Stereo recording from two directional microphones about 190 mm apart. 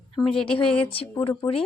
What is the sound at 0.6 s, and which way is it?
A woman's voice, 30° left (ahead or behind).